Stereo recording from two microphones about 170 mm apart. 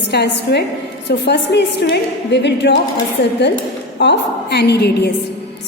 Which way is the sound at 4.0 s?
90° left.